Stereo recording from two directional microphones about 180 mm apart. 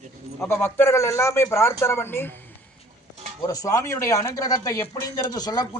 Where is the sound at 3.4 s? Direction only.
20° left (ahead or behind).